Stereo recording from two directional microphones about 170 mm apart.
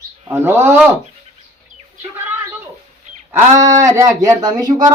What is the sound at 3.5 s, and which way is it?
Speech, 20° right (ahead or behind).